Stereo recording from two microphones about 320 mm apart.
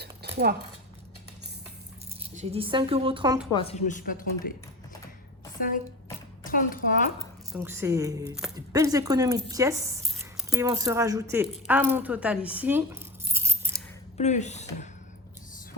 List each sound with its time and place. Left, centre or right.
0.0 s dishes: right
2.3 s a woman's voice: centre
3.5 s speech: centre
5.5 s speech: left
7.5 s speech: centre
14.2 s speech: left